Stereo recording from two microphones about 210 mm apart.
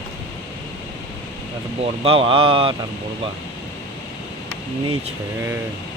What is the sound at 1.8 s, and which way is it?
Speech, 25° right (ahead or behind).